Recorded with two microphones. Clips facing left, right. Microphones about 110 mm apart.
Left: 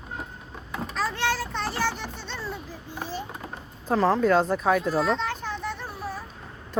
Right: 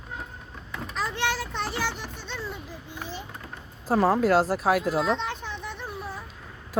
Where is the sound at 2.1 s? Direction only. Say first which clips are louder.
Left 1 dB; 15° right (ahead or behind).